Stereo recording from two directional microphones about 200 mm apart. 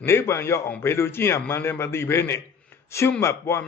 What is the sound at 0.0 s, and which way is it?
A man's voice, 15° left (ahead or behind).